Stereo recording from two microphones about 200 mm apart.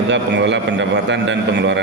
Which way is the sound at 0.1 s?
60° right (ahead or behind).